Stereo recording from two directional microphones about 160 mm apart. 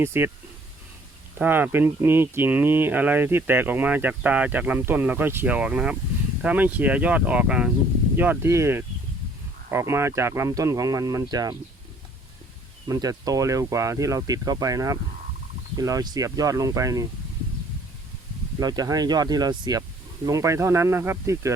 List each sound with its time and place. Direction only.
0.0 s speech: 15° right (ahead or behind)
1.4 s speech: 10° right (ahead or behind)
12.9 s speech: 25° right (ahead or behind)
18.6 s speech: 25° right (ahead or behind)